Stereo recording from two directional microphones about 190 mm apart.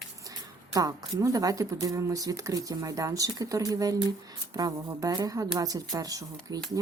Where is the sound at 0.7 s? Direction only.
20° right (ahead or behind).